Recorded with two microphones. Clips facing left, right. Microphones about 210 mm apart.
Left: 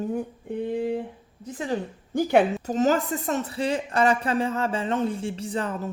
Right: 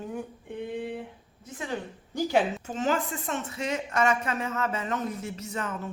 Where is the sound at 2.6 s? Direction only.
40° left (ahead or behind).